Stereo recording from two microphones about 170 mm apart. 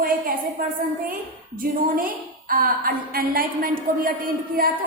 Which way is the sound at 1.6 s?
55° right (ahead or behind).